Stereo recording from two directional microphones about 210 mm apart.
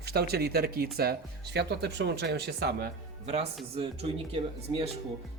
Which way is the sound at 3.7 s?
30° right (ahead or behind).